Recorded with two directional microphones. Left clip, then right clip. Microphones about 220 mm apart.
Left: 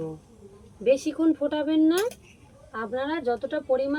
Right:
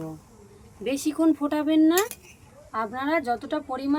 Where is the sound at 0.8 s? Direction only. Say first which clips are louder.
Left 2 dB; 50° right (ahead or behind).